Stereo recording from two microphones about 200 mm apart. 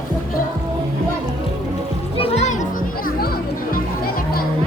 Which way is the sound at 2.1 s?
30° left (ahead or behind).